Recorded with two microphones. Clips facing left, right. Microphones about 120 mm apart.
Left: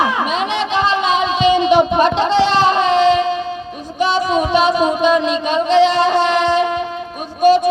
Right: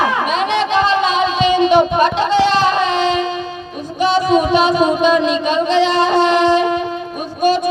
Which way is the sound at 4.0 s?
25° left (ahead or behind).